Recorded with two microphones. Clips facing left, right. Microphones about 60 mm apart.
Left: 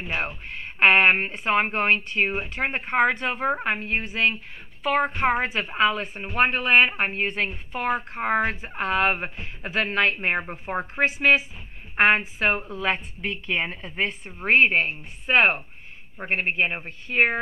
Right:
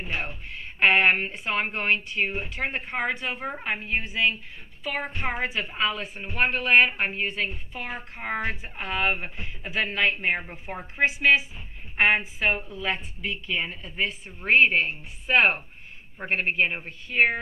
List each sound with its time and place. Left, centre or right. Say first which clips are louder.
0.1 s a woman's voice: left 4 dB; left